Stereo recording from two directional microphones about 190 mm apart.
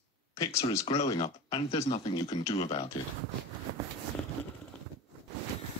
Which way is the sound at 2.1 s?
20° left (ahead or behind).